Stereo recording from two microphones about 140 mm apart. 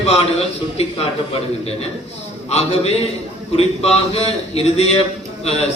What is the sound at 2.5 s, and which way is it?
A man's voice, 50° left (ahead or behind).